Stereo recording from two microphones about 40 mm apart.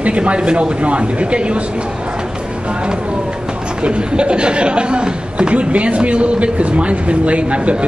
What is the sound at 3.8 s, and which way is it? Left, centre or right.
Speech, right.